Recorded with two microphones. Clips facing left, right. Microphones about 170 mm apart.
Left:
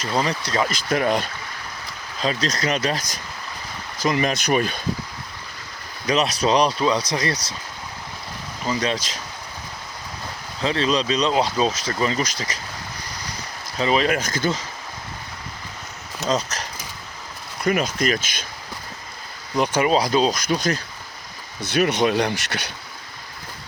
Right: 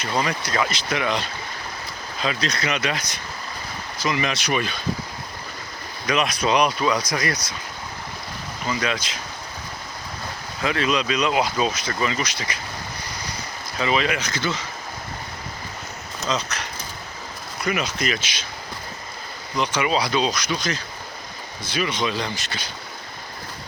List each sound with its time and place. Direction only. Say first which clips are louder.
0.2 s speech: left 1 dB; 30° left (ahead or behind)
0.7 s speech: left 4 dB; 45° left (ahead or behind)
2.2 s speech: left 2 dB; 40° left (ahead or behind)
6.1 s speech: left 2 dB; 35° left (ahead or behind)
8.6 s speech: left 2 dB; 30° left (ahead or behind)
10.6 s speech: left 1 dB; 30° left (ahead or behind)
13.7 s speech: left 3 dB; 35° left (ahead or behind)
16.2 s speech: left 3 dB; 40° left (ahead or behind)
19.5 s speech: left 4 dB; 50° left (ahead or behind)
21.7 s speech: left 6 dB; 60° left (ahead or behind)